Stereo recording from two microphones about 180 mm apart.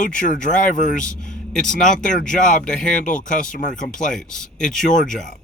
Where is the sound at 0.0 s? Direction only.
45° left (ahead or behind).